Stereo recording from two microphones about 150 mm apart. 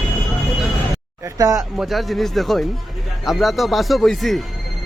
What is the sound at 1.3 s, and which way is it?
Speech, 25° right (ahead or behind).